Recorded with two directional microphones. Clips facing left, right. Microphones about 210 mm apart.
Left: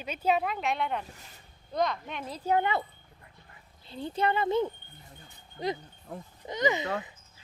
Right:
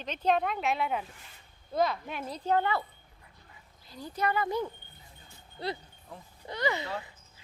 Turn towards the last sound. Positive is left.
turn(degrees=20)  # may be behind; listen again after turning